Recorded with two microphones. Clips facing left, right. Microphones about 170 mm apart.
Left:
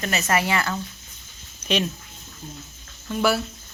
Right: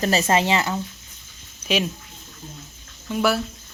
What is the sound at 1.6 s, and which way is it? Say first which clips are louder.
Speech: right 1 dB; 5° right (ahead or behind).